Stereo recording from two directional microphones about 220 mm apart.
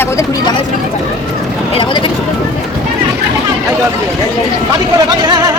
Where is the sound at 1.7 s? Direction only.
25° left (ahead or behind).